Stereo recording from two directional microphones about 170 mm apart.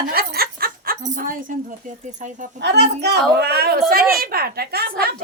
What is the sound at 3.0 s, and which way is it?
A woman's voice, 75° right (ahead or behind).